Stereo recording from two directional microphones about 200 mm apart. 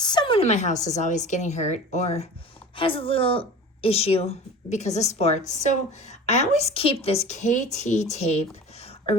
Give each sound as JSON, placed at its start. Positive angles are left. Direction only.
{"t": 0.0, "sound": "a woman's voice", "side_deg": 20}